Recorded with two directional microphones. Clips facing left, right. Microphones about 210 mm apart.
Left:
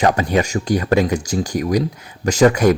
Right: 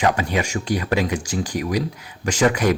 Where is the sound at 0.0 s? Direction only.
40° left (ahead or behind).